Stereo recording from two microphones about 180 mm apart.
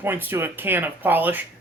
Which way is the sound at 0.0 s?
10° right (ahead or behind).